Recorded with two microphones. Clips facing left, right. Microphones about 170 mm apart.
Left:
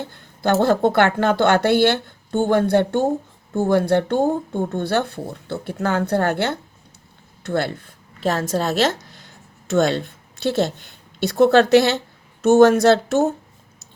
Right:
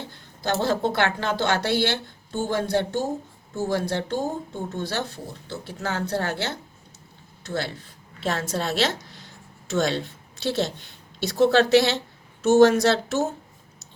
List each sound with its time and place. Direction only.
0.0 s a woman's voice: 55° left (ahead or behind)